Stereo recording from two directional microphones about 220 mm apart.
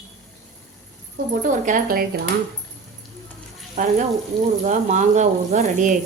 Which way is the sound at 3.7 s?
35° right (ahead or behind).